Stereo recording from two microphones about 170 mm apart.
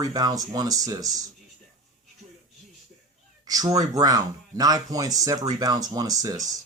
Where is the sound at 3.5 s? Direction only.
20° right (ahead or behind).